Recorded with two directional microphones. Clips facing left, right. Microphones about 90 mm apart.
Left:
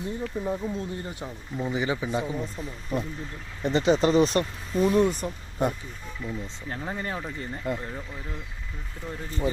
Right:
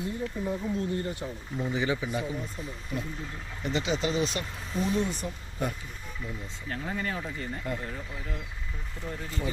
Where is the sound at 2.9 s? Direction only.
45° left (ahead or behind).